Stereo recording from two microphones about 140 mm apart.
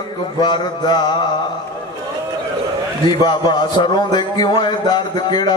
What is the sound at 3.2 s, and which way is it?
A man's voice, 30° left (ahead or behind).